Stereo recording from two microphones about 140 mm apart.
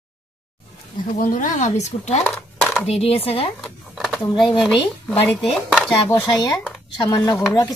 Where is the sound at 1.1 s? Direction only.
65° left (ahead or behind).